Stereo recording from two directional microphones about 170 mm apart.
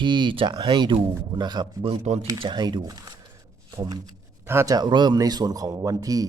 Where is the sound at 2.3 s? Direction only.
25° right (ahead or behind).